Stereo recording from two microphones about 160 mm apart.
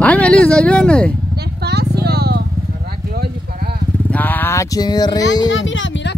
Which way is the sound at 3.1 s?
75° right (ahead or behind).